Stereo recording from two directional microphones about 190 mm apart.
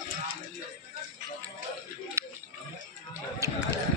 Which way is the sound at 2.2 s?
15° right (ahead or behind).